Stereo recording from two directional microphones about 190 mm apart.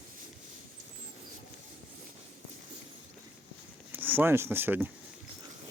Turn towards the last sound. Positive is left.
turn(degrees=-10)  # may be behind; listen again after turning